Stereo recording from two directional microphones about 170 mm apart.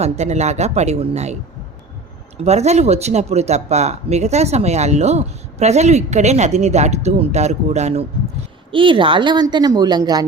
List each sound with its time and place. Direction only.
0.0 s speech: 40° right (ahead or behind)
2.4 s speech: 40° right (ahead or behind)
8.7 s a woman's voice: 30° right (ahead or behind)